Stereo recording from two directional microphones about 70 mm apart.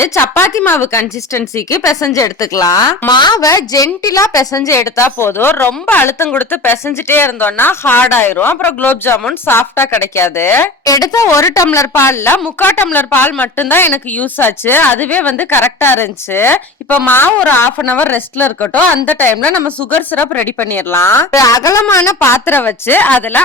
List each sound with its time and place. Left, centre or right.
0.0 s a woman's voice: left
3.1 s a woman's voice: left
10.8 s a woman's voice: left
21.3 s speech: left